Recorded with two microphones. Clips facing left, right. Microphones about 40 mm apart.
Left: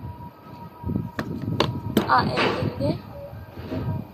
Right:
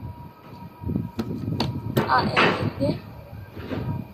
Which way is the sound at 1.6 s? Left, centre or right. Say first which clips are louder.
Left 3 dB; left.